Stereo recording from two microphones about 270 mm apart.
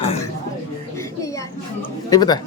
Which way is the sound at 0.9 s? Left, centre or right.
Centre.